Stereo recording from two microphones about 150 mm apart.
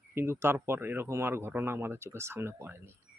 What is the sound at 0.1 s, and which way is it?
Speech, 15° right (ahead or behind).